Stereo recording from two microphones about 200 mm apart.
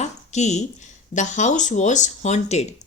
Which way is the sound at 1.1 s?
35° left (ahead or behind).